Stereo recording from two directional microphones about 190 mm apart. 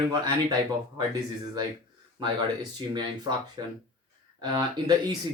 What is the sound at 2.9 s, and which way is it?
Speech, 20° right (ahead or behind).